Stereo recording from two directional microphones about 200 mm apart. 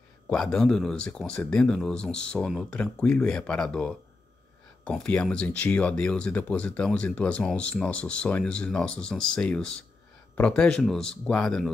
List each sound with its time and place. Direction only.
0.3 s speech: 5° left (ahead or behind)